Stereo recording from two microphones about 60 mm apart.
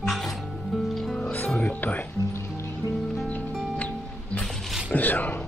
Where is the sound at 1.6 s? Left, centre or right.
Left.